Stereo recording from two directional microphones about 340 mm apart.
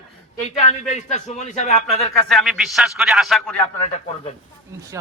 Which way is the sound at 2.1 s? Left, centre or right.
Centre.